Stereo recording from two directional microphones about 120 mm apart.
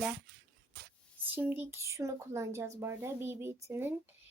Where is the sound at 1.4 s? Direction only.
15° right (ahead or behind).